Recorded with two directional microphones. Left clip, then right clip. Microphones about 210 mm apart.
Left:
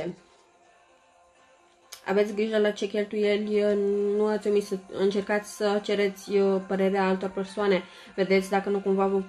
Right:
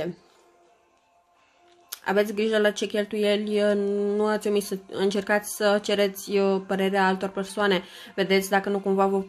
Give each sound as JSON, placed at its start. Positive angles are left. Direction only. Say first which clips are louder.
{"t": 1.9, "sound": "speech", "louder": "right 1 dB", "side_deg": -30}